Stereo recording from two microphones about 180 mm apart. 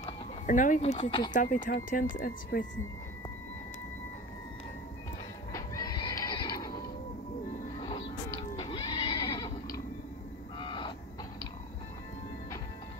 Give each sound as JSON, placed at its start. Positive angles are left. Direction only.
{"t": 0.5, "sound": "speech", "side_deg": 45}
{"t": 5.5, "sound": "horse", "side_deg": 20}
{"t": 7.8, "sound": "neigh", "side_deg": 25}
{"t": 10.6, "sound": "a sound", "side_deg": 25}